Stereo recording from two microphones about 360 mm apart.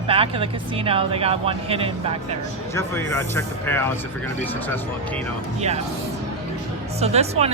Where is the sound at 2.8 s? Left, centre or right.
Centre.